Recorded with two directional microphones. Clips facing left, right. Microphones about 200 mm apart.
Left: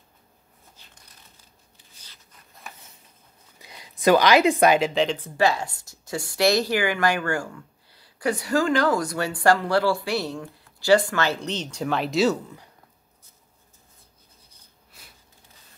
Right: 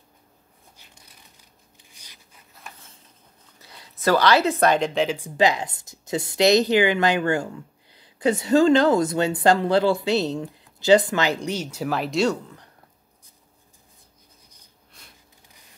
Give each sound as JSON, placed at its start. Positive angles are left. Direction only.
{"t": 3.5, "sound": "a woman's voice", "side_deg": 15}
{"t": 5.1, "sound": "a woman's voice", "side_deg": -15}
{"t": 14.9, "sound": "a sound", "side_deg": 5}